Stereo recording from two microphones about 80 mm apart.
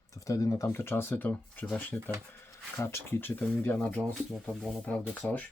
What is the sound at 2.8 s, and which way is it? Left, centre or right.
Speech, left.